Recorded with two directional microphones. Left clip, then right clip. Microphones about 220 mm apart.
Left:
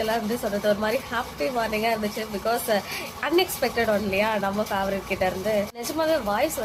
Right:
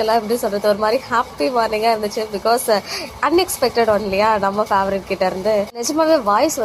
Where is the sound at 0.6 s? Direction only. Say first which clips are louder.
Right 6 dB; 20° right (ahead or behind).